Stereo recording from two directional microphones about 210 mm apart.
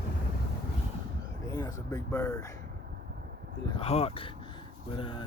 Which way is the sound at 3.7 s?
30° left (ahead or behind).